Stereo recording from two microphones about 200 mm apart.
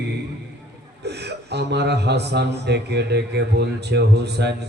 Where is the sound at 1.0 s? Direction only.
55° right (ahead or behind).